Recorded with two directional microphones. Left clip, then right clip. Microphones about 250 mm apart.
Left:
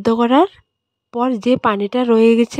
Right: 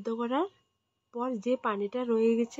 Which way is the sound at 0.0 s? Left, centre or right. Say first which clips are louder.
Left 17 dB; left.